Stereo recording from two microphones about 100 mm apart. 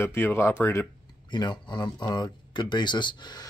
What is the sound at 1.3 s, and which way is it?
Speech, 50° left (ahead or behind).